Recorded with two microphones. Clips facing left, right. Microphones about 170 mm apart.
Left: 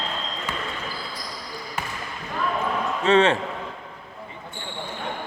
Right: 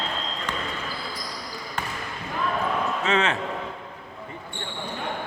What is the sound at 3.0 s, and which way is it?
Speech, 30° left (ahead or behind).